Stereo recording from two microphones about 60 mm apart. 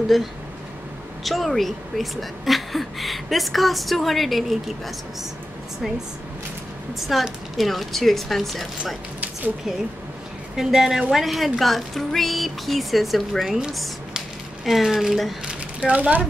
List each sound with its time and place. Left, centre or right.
1.2 s a woman's voice: centre
7.0 s a woman's voice: centre
10.5 s a woman's voice: centre
13.5 s speech: centre
13.7 s speech: centre
15.4 s a sound: centre